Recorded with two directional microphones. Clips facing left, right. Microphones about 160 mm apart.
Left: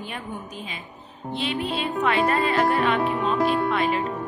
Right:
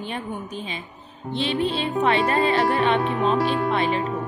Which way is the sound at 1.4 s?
30° right (ahead or behind).